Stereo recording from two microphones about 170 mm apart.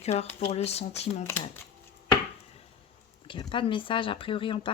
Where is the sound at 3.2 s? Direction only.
30° left (ahead or behind).